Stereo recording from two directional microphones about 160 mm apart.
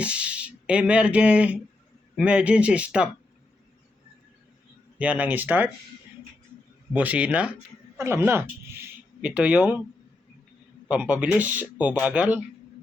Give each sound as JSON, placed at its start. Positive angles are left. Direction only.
{"t": 0.0, "sound": "speech", "side_deg": -5}
{"t": 4.9, "sound": "speech", "side_deg": -10}
{"t": 6.9, "sound": "speech", "side_deg": -10}
{"t": 10.8, "sound": "speech", "side_deg": -10}